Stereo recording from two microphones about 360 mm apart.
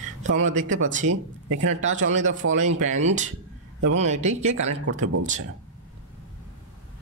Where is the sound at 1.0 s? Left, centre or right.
Right.